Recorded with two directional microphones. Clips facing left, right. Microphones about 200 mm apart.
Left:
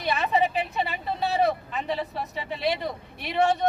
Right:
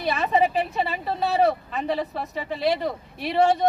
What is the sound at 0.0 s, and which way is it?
Speech, 35° right (ahead or behind).